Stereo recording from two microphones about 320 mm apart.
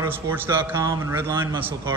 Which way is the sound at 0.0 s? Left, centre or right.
Centre.